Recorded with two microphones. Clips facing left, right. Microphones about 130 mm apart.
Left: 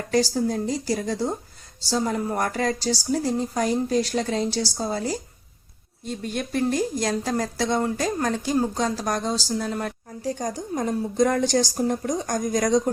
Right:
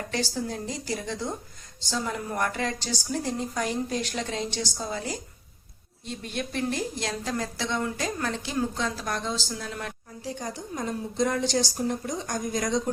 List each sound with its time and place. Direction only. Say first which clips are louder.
0.1 s a woman's voice: left 10 dB; 40° left (ahead or behind)